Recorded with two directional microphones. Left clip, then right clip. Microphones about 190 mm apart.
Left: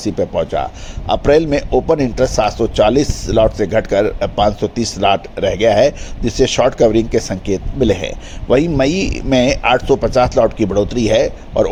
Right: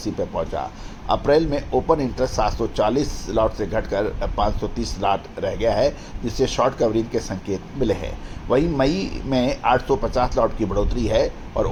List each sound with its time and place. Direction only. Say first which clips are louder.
0.0 s a man's voice: left 8 dB; 45° left (ahead or behind)